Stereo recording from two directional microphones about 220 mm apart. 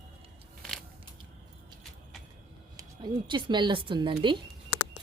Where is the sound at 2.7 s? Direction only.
20° right (ahead or behind).